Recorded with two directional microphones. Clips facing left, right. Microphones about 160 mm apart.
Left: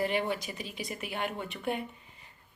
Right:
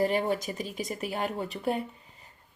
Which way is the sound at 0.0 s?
40° right (ahead or behind).